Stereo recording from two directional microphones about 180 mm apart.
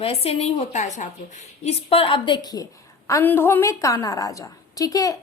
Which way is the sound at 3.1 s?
10° left (ahead or behind).